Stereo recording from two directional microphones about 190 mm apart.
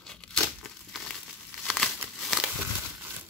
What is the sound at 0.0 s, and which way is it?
Crumpling, 5° left (ahead or behind).